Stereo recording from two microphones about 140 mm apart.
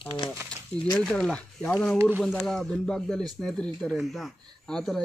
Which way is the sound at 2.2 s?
5° left (ahead or behind).